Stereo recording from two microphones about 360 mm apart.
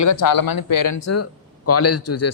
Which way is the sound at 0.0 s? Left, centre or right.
Left.